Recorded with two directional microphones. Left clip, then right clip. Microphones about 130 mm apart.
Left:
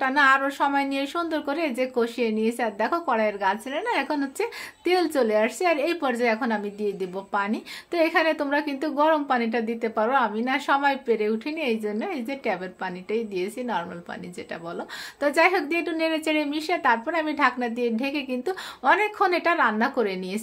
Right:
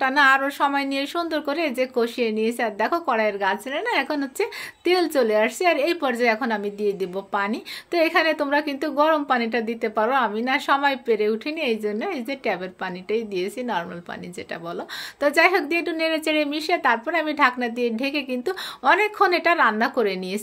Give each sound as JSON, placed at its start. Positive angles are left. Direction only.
{"t": 0.0, "sound": "a woman's voice", "side_deg": -30}
{"t": 15.1, "sound": "a woman's voice", "side_deg": -30}